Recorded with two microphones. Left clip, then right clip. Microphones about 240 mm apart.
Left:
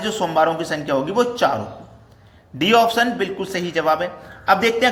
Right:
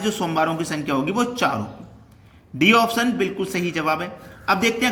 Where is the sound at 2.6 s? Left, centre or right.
Centre.